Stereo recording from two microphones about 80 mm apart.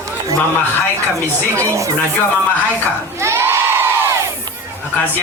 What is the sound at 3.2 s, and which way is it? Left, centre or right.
Crowd, right.